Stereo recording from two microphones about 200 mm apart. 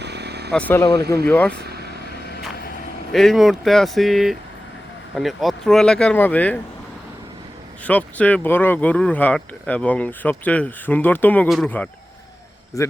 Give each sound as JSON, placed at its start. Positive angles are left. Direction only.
{"t": 0.0, "sound": "vehicle", "side_deg": -55}
{"t": 0.5, "sound": "speech", "side_deg": 10}
{"t": 1.3, "sound": "speech", "side_deg": 10}
{"t": 3.1, "sound": "speech", "side_deg": 0}
{"t": 7.9, "sound": "speech", "side_deg": 5}
{"t": 12.7, "sound": "speech", "side_deg": 15}